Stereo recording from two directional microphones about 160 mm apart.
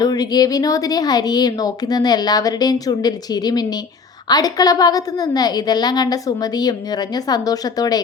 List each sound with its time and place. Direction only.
0.0 s speech: 25° left (ahead or behind)